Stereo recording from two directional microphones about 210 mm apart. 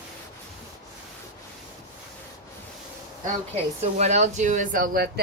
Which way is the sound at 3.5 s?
30° right (ahead or behind).